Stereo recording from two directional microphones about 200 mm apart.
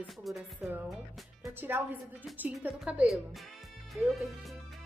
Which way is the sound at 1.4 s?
10° right (ahead or behind).